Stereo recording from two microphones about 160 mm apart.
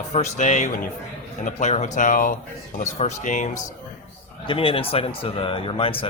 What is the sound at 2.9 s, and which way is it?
Speech, 45° left (ahead or behind).